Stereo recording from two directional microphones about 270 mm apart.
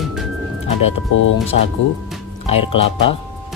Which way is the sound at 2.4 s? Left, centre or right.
Left.